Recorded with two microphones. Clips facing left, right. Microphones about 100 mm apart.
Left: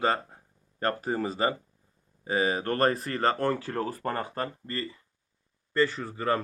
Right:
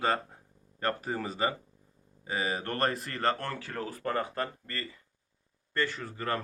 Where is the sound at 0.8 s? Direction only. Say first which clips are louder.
Left 4 dB; 35° left (ahead or behind).